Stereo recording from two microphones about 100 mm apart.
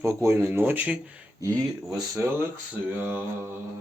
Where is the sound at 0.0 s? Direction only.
25° right (ahead or behind).